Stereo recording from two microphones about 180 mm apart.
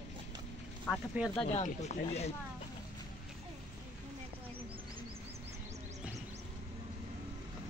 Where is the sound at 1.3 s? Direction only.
35° left (ahead or behind).